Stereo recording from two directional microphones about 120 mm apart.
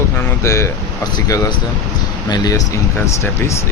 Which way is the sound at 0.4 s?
25° left (ahead or behind).